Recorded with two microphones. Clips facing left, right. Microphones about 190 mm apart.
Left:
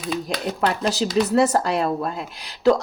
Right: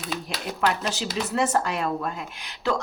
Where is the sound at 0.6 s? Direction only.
35° left (ahead or behind).